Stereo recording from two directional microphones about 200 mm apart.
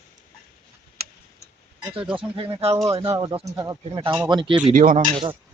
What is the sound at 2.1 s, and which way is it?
Speech, 25° right (ahead or behind).